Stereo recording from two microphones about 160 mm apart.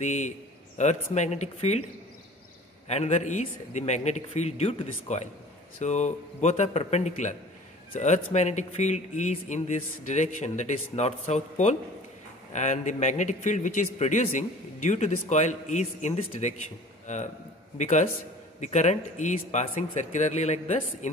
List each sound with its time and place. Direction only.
0.0 s a man's voice: 50° left (ahead or behind)
2.9 s a man's voice: 45° left (ahead or behind)
17.7 s a man's voice: 50° left (ahead or behind)